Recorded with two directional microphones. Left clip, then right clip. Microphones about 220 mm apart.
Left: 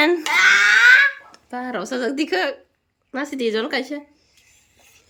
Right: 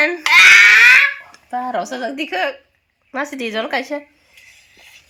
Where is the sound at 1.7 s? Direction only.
15° left (ahead or behind).